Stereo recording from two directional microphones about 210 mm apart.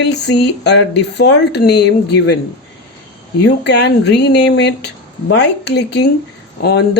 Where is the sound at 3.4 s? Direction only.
55° left (ahead or behind).